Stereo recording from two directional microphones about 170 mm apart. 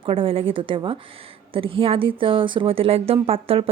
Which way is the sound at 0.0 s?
30° right (ahead or behind).